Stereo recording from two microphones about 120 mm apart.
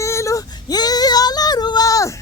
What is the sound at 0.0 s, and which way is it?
Female singing, 25° left (ahead or behind).